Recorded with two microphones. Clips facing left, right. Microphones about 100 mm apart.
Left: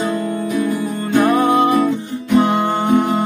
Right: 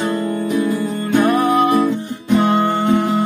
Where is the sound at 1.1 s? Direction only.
25° left (ahead or behind).